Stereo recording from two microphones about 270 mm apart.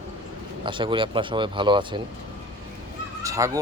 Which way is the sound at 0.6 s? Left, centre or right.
Centre.